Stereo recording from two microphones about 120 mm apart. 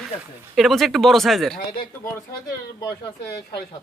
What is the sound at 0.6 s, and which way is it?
Speech, centre (ahead or behind).